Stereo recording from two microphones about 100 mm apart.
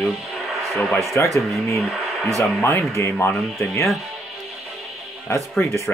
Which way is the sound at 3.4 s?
Centre (ahead or behind).